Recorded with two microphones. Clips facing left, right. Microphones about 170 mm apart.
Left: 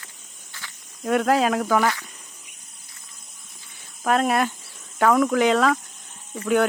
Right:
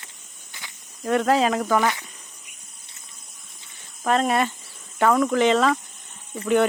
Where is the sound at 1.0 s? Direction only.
Centre (ahead or behind).